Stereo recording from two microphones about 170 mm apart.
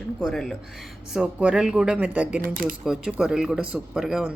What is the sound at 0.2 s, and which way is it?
Speech, centre (ahead or behind).